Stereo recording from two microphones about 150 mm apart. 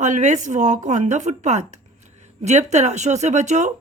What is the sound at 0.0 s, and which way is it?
A woman's voice, 55° right (ahead or behind).